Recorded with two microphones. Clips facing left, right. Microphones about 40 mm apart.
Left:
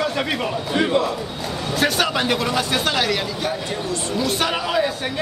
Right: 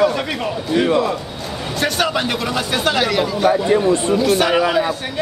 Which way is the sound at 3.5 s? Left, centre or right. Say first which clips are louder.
Right 11 dB; right.